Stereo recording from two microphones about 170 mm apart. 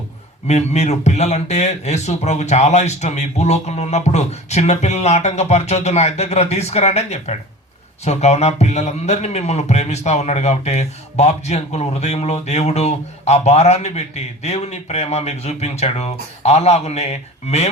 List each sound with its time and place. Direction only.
0.4 s speech: 40° left (ahead or behind)